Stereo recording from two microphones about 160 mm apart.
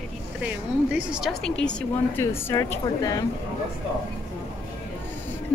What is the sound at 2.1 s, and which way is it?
A woman's voice, 15° left (ahead or behind).